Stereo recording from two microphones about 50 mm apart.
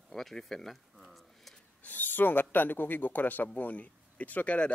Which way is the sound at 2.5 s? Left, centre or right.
Left.